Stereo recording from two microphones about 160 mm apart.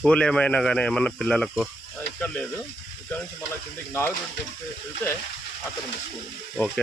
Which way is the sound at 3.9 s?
15° left (ahead or behind).